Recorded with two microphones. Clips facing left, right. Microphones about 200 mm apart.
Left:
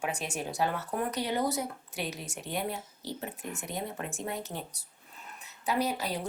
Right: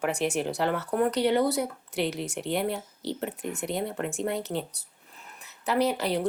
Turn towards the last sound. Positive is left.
turn(degrees=-70)  # may be behind; listen again after turning